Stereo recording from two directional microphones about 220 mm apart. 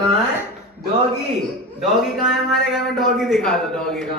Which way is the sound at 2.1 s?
Centre (ahead or behind).